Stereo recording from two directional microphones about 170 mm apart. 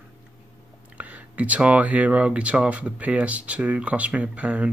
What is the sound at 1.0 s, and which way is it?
Speech, 10° right (ahead or behind).